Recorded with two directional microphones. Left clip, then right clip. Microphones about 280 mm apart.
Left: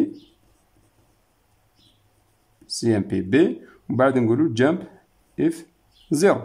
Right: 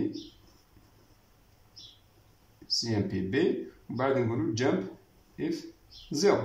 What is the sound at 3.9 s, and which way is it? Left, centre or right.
Speech, left.